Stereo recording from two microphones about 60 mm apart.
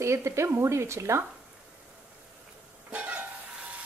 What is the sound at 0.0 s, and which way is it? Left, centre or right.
Speech, right.